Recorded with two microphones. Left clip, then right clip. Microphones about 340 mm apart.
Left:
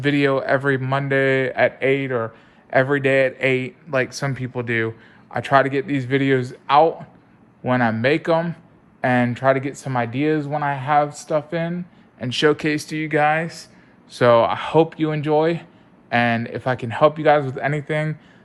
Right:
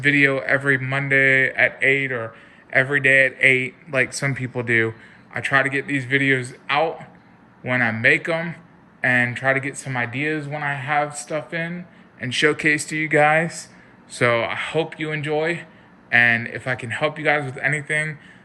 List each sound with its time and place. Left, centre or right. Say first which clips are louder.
0.0 s speech: right 2 dB; centre
3.0 s speech: right 2 dB; left
4.4 s speech: right 4 dB; centre